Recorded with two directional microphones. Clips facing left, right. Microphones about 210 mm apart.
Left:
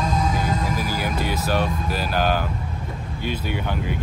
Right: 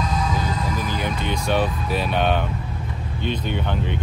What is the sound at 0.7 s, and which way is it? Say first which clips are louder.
Speech: left 1 dB; 5° left (ahead or behind).